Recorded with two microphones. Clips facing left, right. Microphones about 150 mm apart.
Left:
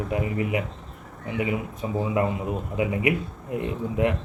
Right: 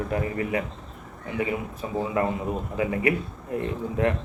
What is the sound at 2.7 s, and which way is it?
A man's voice, 20° left (ahead or behind).